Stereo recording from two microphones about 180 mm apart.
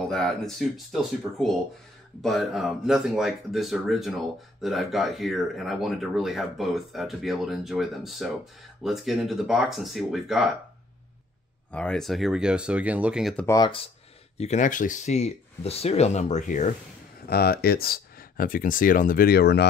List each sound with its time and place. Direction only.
0.0 s speech: 5° left (ahead or behind)
11.7 s speech: 5° left (ahead or behind)
13.5 s speech: 25° left (ahead or behind)
14.4 s speech: 40° left (ahead or behind)
17.3 s speech: 60° left (ahead or behind)